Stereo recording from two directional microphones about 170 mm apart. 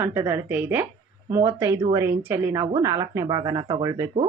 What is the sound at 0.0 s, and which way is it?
A woman's voice, 15° right (ahead or behind).